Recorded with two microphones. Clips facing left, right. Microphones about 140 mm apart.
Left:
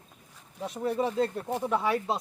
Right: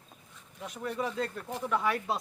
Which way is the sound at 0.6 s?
30° left (ahead or behind).